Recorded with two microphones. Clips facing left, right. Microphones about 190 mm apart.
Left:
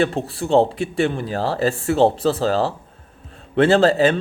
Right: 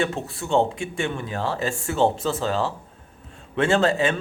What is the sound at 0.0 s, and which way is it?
Speech, 35° left (ahead or behind).